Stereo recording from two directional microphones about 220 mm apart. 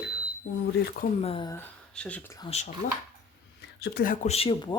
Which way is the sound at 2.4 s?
30° left (ahead or behind).